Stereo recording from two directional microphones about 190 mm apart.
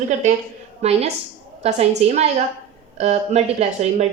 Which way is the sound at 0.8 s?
35° right (ahead or behind).